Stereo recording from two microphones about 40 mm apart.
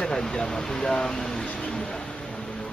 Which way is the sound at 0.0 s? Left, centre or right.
Centre.